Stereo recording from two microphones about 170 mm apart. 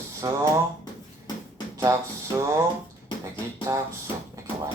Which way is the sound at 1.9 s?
20° right (ahead or behind).